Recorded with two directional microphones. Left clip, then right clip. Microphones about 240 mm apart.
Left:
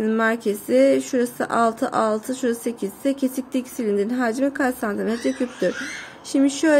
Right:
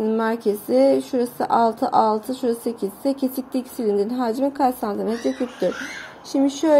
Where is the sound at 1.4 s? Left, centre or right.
Left.